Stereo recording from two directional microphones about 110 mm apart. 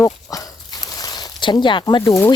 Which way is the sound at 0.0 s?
30° left (ahead or behind).